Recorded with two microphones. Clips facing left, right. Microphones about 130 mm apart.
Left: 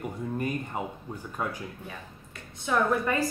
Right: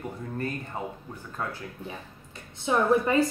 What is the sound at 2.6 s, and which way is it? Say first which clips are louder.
Speech: right 3 dB; 25° right (ahead or behind).